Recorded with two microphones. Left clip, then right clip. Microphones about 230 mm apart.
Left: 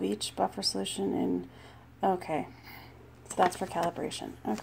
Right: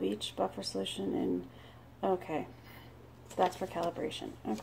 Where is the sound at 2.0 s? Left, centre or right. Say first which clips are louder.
Left 4 dB; left.